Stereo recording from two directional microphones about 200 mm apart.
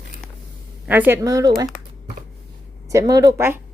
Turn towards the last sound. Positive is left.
turn(degrees=-10)  # may be behind; listen again after turning